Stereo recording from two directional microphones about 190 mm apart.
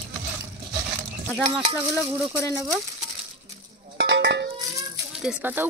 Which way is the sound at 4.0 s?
65° right (ahead or behind).